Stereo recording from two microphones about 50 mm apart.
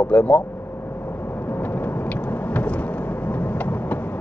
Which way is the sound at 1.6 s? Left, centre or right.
Left.